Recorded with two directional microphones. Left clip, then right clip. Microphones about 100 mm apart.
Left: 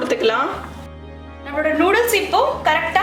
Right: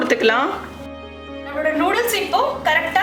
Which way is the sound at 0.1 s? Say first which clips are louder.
Right 2 dB; 30° right (ahead or behind).